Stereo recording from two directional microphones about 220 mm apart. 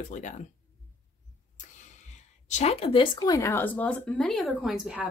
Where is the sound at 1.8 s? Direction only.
35° left (ahead or behind).